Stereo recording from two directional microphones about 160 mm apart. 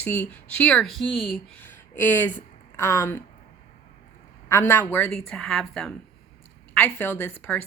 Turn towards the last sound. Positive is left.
turn(degrees=10)  # may be behind; listen again after turning